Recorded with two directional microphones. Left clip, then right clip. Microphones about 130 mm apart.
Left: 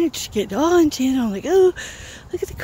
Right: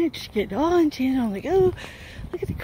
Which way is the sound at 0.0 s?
40° left (ahead or behind).